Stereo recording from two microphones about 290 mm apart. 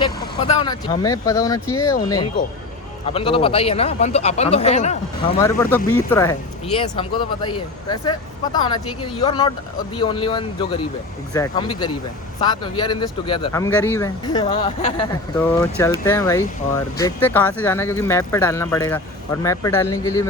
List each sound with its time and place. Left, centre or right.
0.3 s speech: centre
5.4 s speech: centre
15.4 s speech: centre